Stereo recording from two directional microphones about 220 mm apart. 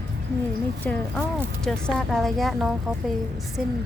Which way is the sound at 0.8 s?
5° left (ahead or behind).